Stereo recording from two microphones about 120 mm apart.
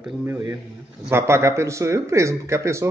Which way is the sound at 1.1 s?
20° right (ahead or behind).